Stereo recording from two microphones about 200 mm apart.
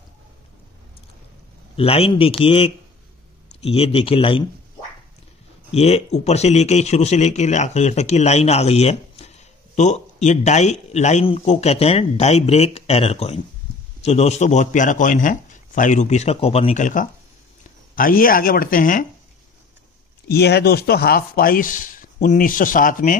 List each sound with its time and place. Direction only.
1.8 s speech: 30° left (ahead or behind)
5.7 s speech: 30° left (ahead or behind)
20.2 s speech: 55° left (ahead or behind)